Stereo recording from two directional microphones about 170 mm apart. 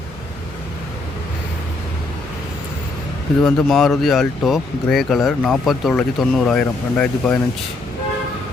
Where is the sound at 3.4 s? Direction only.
5° left (ahead or behind).